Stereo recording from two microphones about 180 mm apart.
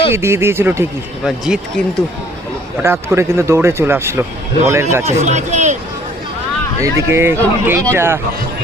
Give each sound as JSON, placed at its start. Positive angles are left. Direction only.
{"t": 0.1, "sound": "speech", "side_deg": -15}
{"t": 1.2, "sound": "speech", "side_deg": 0}
{"t": 2.8, "sound": "speech", "side_deg": -15}
{"t": 5.2, "sound": "speech", "side_deg": -40}
{"t": 6.8, "sound": "speech", "side_deg": -15}